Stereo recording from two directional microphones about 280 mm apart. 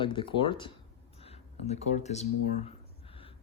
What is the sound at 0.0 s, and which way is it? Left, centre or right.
Speech, centre.